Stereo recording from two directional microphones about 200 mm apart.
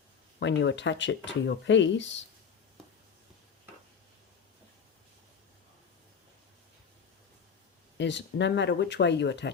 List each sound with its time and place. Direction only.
0.3 s speech: 60° left (ahead or behind)
7.9 s speech: 60° left (ahead or behind)